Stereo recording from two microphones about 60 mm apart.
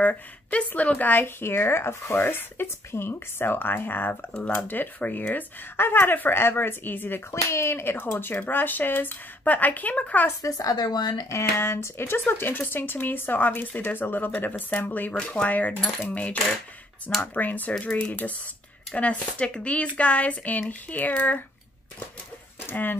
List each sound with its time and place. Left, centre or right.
0.0 s speech: left
7.2 s speech: left
10.4 s speech: left
11.2 s speech: left
17.7 s speech: centre
22.7 s speech: left